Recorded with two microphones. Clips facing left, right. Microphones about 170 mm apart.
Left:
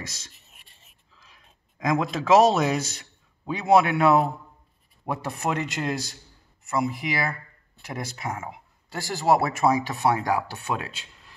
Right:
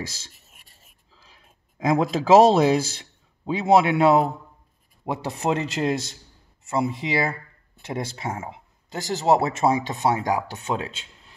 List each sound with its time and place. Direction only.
0.0 s speech: 30° right (ahead or behind)